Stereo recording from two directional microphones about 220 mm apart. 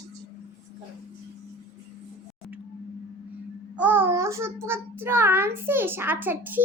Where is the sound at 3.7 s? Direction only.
5° right (ahead or behind).